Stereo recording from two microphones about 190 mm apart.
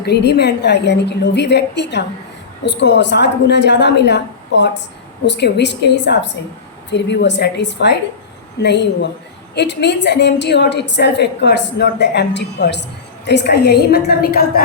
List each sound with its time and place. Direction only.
0.0 s a woman's voice: 60° left (ahead or behind)